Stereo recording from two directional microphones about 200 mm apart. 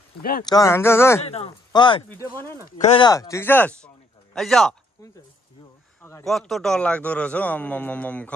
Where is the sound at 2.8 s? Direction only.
30° left (ahead or behind).